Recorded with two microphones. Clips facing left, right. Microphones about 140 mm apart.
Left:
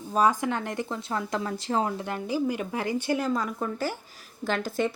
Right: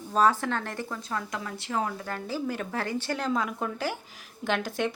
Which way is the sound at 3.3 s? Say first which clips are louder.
Left 1 dB; 5° right (ahead or behind).